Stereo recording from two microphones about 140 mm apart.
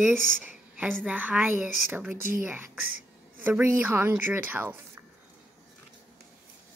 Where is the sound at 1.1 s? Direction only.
10° right (ahead or behind).